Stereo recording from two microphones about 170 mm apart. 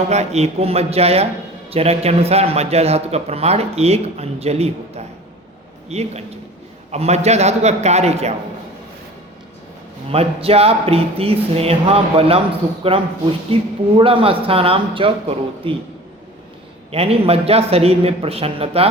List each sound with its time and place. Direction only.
0.1 s a man's voice: 40° right (ahead or behind)
10.1 s a man's voice: 35° right (ahead or behind)
16.9 s a man's voice: 35° right (ahead or behind)